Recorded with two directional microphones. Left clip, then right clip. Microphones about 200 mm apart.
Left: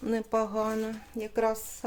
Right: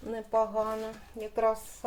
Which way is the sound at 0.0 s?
50° left (ahead or behind).